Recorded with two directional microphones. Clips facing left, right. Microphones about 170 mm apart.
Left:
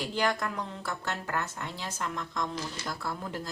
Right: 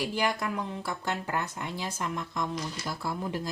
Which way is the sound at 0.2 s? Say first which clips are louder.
Left 3 dB; 10° right (ahead or behind).